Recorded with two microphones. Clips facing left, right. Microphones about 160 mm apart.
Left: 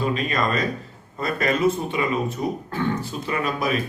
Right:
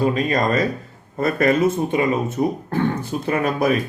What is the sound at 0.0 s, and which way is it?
A man's voice, 40° right (ahead or behind).